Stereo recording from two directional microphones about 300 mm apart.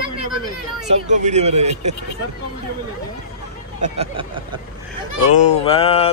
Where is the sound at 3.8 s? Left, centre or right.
Centre.